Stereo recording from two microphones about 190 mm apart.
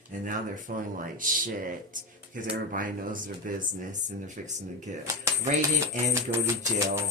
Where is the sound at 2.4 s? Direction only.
45° right (ahead or behind).